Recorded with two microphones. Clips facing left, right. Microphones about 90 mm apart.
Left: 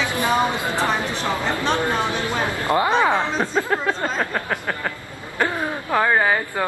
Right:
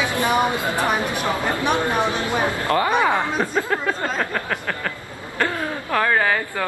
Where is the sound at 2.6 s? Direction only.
20° left (ahead or behind).